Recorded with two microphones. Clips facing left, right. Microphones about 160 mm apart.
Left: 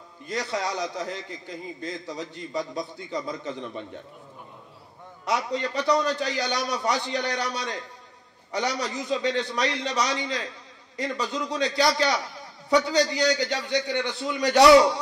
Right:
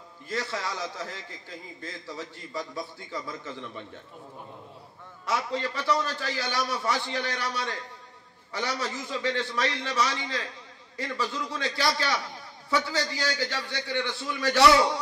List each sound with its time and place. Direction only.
0.3 s a man's voice: 20° left (ahead or behind)
5.2 s a man's voice: 20° left (ahead or behind)